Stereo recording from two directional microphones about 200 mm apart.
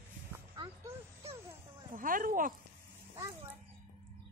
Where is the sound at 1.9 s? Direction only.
45° right (ahead or behind).